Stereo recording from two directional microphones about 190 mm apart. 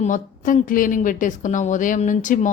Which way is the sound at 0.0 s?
45° left (ahead or behind).